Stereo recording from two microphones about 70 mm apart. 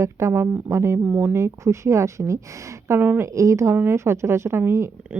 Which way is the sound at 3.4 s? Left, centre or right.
Right.